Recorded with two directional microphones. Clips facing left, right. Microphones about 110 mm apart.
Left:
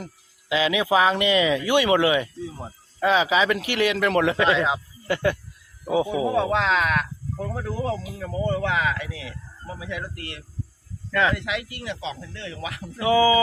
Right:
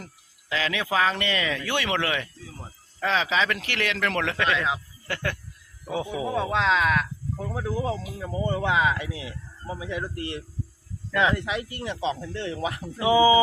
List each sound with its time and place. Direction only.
0.0 s speech: 15° left (ahead or behind); by 11.4 s 20° right (ahead or behind)
11.4 s speech: 35° right (ahead or behind)
12.2 s speech: 25° right (ahead or behind)
13.0 s speech: 20° right (ahead or behind)